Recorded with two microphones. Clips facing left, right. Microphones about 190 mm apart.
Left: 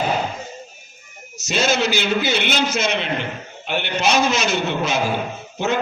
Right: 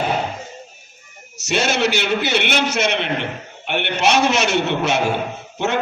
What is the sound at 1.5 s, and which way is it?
A man's voice, 65° right (ahead or behind).